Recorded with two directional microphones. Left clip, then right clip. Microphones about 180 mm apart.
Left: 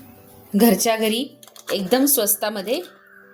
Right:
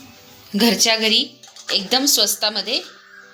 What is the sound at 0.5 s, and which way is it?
Speech, 45° left (ahead or behind).